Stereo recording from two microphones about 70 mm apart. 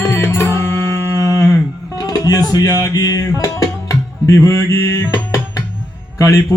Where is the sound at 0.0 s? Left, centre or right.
Left.